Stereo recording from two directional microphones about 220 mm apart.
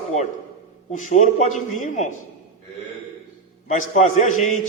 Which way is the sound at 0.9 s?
35° left (ahead or behind).